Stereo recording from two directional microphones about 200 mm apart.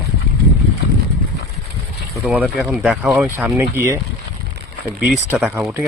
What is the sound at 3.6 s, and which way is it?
Speech, 15° right (ahead or behind).